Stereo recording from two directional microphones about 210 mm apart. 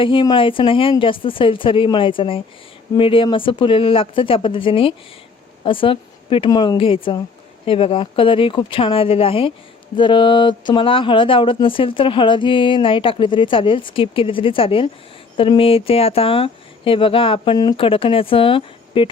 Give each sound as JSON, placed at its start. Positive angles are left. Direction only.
{"t": 0.0, "sound": "speech", "side_deg": 25}